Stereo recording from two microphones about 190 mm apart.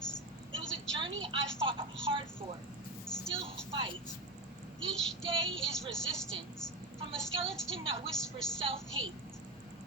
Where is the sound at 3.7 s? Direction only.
25° right (ahead or behind).